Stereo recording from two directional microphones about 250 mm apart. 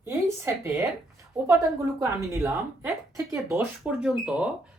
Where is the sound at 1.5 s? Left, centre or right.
Centre.